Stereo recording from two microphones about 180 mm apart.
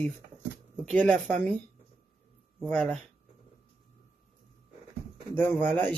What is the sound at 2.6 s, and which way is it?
Speech, centre (ahead or behind).